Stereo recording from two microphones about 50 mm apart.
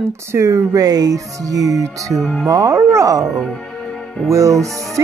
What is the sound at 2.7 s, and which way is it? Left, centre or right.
Speech, right.